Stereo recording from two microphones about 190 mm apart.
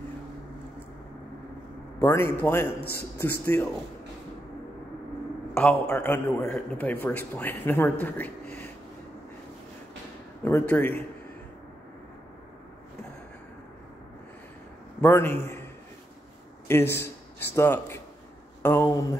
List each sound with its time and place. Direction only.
2.0 s a man's voice: 15° left (ahead or behind)
5.5 s a man's voice: 5° left (ahead or behind)
10.4 s a man's voice: 10° left (ahead or behind)
15.0 s a man's voice: 10° left (ahead or behind)
16.6 s a man's voice: 15° left (ahead or behind)